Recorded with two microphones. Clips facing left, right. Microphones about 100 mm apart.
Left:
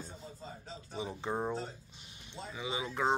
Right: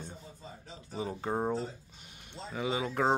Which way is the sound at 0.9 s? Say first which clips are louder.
Right 3 dB; 40° right (ahead or behind).